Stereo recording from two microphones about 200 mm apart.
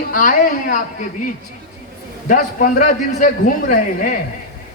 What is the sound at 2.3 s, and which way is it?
A man's voice, 40° left (ahead or behind).